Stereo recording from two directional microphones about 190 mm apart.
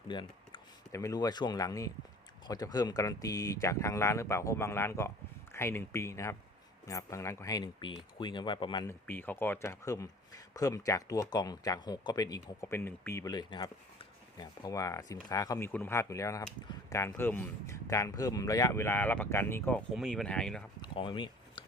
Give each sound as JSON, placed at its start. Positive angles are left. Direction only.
{"t": 0.1, "sound": "speech", "side_deg": 25}
{"t": 19.9, "sound": "speech", "side_deg": 0}
{"t": 20.8, "sound": "a sound", "side_deg": 25}